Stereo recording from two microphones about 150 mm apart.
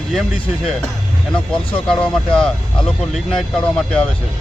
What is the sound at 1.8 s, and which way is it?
Speech, 5° left (ahead or behind).